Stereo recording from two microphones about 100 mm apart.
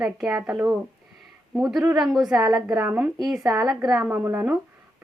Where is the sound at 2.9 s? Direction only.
15° right (ahead or behind).